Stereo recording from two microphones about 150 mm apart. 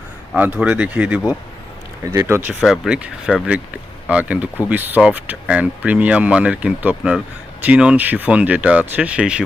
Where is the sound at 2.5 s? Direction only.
5° right (ahead or behind).